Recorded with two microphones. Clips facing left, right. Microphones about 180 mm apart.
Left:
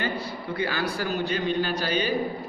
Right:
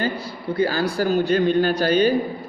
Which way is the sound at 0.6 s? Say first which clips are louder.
Right 8 dB; 40° right (ahead or behind).